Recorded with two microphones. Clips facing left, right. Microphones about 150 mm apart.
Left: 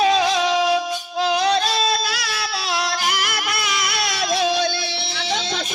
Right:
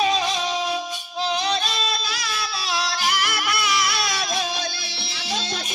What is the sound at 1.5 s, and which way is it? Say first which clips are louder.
Music: left 6 dB; 70° left (ahead or behind).